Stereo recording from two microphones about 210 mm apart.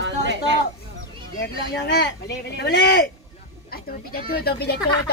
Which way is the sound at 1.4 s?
55° left (ahead or behind).